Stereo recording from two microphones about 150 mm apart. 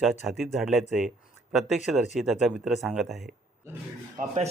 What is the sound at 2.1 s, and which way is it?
Speech, centre (ahead or behind).